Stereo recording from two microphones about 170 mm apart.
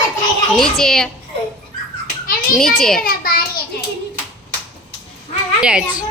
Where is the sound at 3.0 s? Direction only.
60° left (ahead or behind).